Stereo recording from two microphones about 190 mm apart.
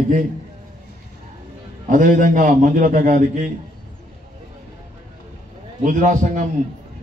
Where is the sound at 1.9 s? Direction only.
45° right (ahead or behind).